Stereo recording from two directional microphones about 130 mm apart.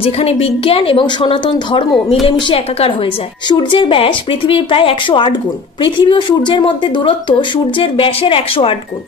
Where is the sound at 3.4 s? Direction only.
40° left (ahead or behind).